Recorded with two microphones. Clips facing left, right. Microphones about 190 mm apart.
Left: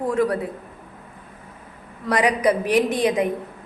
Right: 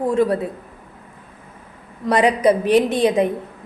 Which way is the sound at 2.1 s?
25° right (ahead or behind).